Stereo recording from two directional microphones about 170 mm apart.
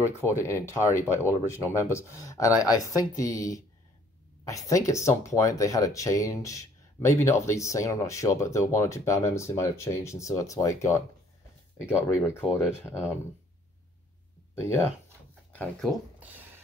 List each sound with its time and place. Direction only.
0.0 s speech: 15° left (ahead or behind)
14.5 s speech: 15° left (ahead or behind)
16.2 s a sound: 10° right (ahead or behind)